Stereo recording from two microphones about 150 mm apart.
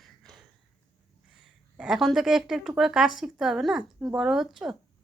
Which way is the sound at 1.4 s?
5° right (ahead or behind).